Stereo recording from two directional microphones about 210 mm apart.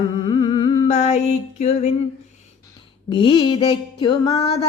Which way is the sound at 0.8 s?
30° left (ahead or behind).